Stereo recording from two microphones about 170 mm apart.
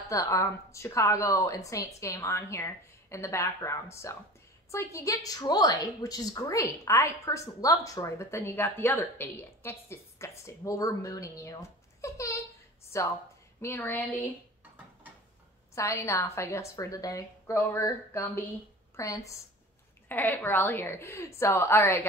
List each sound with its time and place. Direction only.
0.1 s a woman's voice: 20° left (ahead or behind)
15.7 s a woman's voice: 15° left (ahead or behind)